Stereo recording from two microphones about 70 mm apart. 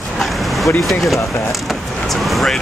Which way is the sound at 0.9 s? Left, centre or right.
Centre.